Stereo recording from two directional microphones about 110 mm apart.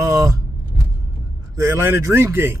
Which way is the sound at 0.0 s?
30° right (ahead or behind).